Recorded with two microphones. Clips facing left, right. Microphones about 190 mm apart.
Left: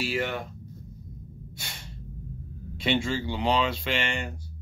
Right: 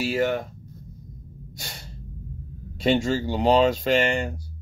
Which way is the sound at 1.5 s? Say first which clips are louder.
Right 5 dB; 40° right (ahead or behind).